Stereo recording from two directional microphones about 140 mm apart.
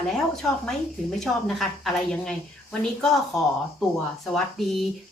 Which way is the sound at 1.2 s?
Centre (ahead or behind).